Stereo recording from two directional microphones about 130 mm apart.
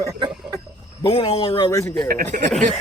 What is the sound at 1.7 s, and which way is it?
Speech, 25° left (ahead or behind).